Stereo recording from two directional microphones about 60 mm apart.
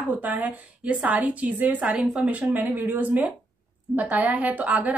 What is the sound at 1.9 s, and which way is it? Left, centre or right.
Speech, centre.